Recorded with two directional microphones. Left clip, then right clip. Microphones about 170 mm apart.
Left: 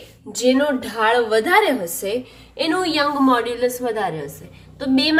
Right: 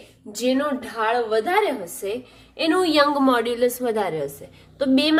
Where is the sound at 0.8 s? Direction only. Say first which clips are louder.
Left 5 dB; centre (ahead or behind).